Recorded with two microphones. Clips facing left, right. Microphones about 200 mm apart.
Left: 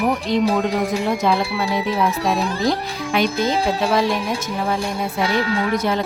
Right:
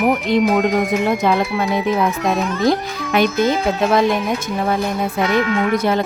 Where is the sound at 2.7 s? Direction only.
55° right (ahead or behind).